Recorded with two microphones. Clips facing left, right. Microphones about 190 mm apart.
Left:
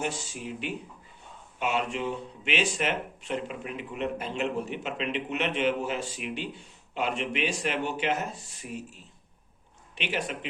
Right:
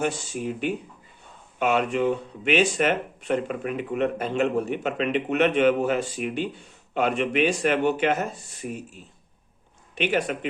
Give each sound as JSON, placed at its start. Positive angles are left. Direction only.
{"t": 0.0, "sound": "speech", "side_deg": -50}
{"t": 9.9, "sound": "speech", "side_deg": -50}